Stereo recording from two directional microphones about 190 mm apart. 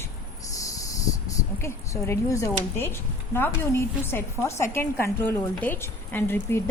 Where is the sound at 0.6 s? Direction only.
15° left (ahead or behind).